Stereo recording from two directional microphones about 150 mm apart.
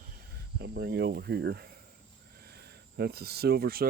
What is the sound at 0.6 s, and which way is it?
Speech, 90° right.